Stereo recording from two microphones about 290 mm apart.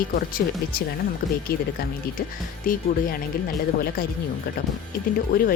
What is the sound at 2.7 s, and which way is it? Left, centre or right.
Speech, left.